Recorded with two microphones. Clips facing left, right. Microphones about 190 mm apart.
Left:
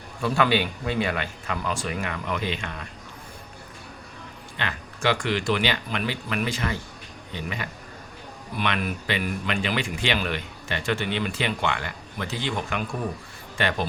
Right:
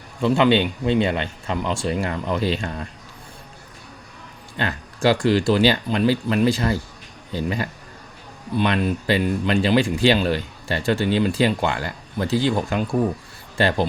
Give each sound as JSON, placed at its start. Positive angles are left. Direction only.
{"t": 0.2, "sound": "speech", "side_deg": -20}
{"t": 4.5, "sound": "speech", "side_deg": -35}